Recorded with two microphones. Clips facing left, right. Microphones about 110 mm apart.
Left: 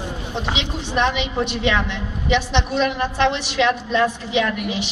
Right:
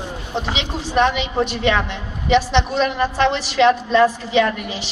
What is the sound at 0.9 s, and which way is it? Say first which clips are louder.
A woman's voice: right 3 dB; 40° right (ahead or behind).